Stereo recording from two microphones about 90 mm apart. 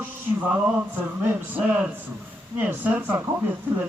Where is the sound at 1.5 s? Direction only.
20° right (ahead or behind).